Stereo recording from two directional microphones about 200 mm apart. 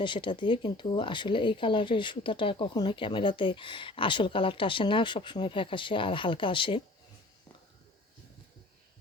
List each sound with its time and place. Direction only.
0.0 s speech: 25° left (ahead or behind)